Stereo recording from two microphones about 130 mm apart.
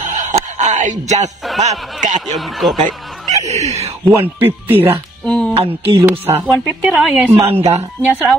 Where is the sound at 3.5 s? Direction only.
55° right (ahead or behind).